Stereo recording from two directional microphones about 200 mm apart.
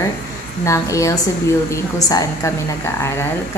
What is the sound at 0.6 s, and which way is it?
A woman's voice, 15° left (ahead or behind).